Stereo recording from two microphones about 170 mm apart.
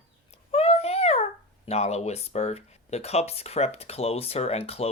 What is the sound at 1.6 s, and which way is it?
Speech, 40° left (ahead or behind).